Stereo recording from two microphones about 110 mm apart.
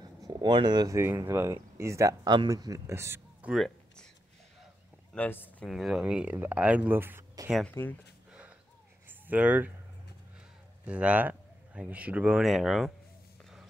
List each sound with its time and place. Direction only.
0.3 s speech: 45° right (ahead or behind)
0.9 s speech: 25° right (ahead or behind)
2.2 s speech: 40° right (ahead or behind)
3.5 s a sound: 5° left (ahead or behind)
5.1 s speech: 15° left (ahead or behind)
5.7 s speech: centre (ahead or behind); by 7.2 s 20° right (ahead or behind)
7.8 s speech: 20° left (ahead or behind)
8.3 s a sound: 10° right (ahead or behind)
9.3 s speech: 15° right (ahead or behind)
10.9 s speech: 10° right (ahead or behind)